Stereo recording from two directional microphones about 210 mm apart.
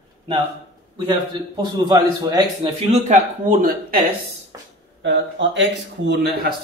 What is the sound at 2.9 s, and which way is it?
Speech, 40° right (ahead or behind).